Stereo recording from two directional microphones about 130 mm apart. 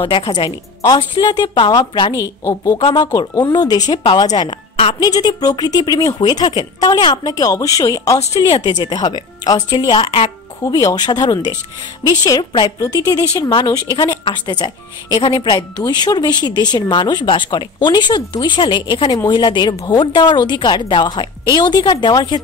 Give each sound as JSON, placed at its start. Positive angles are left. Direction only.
{"t": 0.0, "sound": "speech", "side_deg": 45}
{"t": 5.0, "sound": "speech", "side_deg": 30}